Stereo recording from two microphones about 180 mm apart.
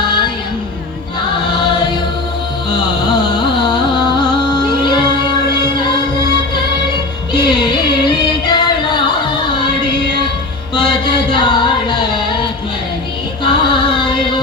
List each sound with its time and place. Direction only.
1.6 s music: 25° left (ahead or behind)
3.1 s music: 25° left (ahead or behind)
7.3 s music: 25° left (ahead or behind)
10.8 s music: 25° left (ahead or behind)
13.4 s music: 25° left (ahead or behind)